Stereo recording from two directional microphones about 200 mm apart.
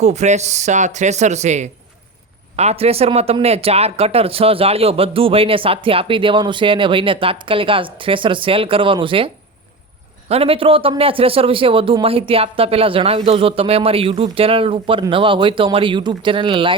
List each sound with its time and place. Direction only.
0.0 s speech: 35° right (ahead or behind)